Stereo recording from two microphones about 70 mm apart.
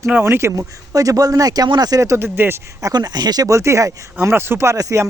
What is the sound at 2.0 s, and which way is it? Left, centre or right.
Speech, right.